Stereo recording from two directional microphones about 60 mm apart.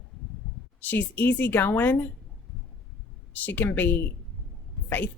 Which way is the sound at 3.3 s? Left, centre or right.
Left.